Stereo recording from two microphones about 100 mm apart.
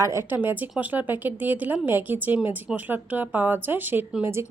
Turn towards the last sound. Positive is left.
turn(degrees=-25)  # may be behind; listen again after turning